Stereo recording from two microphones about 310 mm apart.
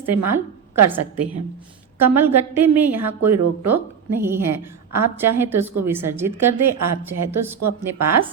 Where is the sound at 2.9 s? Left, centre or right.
Right.